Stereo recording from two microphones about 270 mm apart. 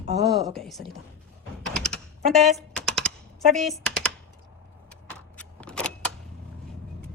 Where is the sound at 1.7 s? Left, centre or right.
Centre.